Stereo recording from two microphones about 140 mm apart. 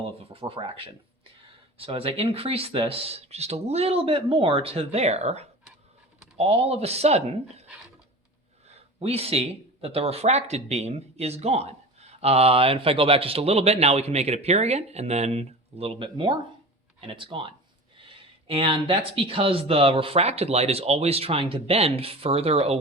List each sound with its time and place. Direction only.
0.2 s speech: 40° right (ahead or behind)